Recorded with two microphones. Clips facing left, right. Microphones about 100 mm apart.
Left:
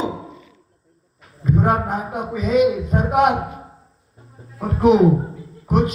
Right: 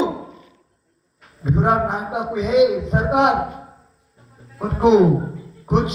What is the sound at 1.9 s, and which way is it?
A man's voice, 50° left (ahead or behind).